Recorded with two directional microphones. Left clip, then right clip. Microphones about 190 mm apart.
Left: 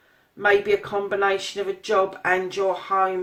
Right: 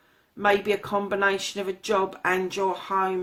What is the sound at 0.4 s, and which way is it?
Speech, 45° right (ahead or behind).